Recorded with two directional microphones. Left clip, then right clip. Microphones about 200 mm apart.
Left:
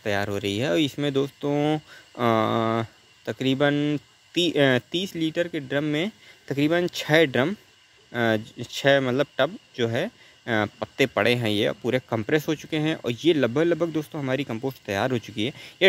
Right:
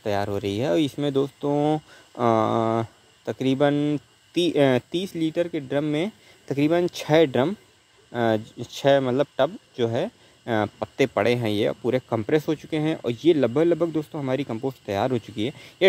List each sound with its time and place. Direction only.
0.0 s a man's voice: centre (ahead or behind)